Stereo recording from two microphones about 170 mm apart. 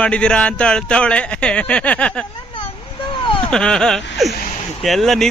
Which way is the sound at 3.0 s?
30° left (ahead or behind).